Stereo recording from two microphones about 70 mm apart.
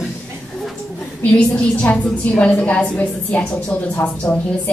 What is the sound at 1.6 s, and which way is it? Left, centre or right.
A woman's voice, centre.